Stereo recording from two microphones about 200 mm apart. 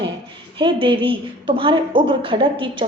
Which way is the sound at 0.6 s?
25° right (ahead or behind).